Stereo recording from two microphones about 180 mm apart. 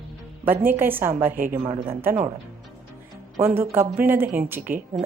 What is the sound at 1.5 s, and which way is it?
Speech, 30° right (ahead or behind).